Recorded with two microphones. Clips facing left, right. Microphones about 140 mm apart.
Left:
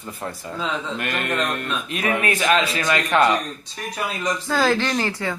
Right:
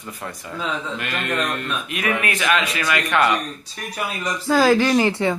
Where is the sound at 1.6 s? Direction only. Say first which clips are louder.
Even; 35° left (ahead or behind).